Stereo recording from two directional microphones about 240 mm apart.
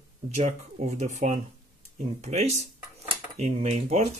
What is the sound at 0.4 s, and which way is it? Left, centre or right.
Speech, right.